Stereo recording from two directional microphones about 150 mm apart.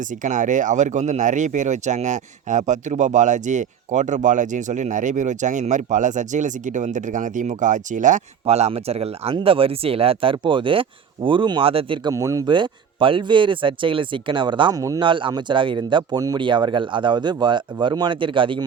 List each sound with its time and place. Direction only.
0.2 s speech: 55° right (ahead or behind); by 12.1 s 35° right (ahead or behind)
12.1 s speech: 20° right (ahead or behind)
15.0 s speech: 35° right (ahead or behind)